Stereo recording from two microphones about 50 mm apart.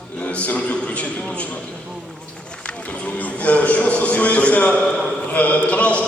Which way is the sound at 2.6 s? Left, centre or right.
Left.